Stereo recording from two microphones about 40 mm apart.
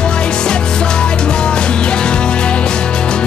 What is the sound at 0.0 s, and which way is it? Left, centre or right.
Music, left.